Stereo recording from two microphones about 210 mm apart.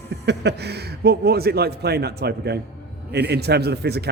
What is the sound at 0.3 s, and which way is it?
Speech, 50° right (ahead or behind).